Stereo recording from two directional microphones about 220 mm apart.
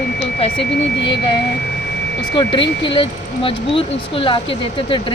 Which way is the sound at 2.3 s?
20° left (ahead or behind).